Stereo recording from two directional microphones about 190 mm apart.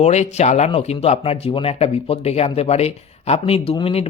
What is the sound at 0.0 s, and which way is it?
Speech, 35° left (ahead or behind).